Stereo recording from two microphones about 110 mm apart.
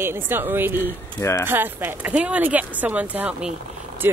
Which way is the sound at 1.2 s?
25° left (ahead or behind).